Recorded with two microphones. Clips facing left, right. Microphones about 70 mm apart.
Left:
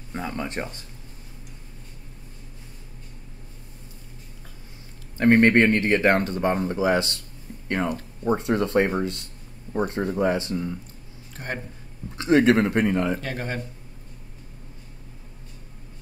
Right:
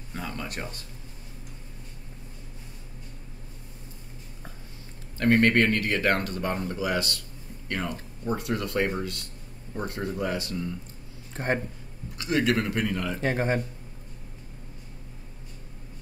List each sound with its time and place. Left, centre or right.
0.1 s speech: left
5.1 s speech: left
11.3 s speech: right
12.2 s speech: left
13.2 s speech: right